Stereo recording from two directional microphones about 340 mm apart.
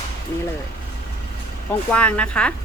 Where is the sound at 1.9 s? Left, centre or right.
Centre.